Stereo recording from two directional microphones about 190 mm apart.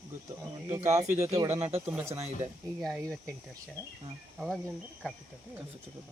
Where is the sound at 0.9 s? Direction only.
15° right (ahead or behind).